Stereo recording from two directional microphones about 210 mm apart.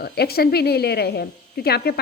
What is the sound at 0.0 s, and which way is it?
Speech, 50° left (ahead or behind).